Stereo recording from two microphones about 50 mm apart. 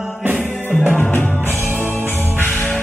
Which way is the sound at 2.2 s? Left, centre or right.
Left.